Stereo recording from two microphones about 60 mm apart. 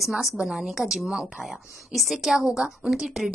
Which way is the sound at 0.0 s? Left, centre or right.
Centre.